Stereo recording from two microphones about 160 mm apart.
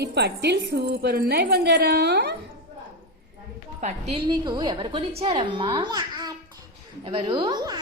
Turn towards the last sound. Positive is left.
turn(degrees=-25)  # may be behind; listen again after turning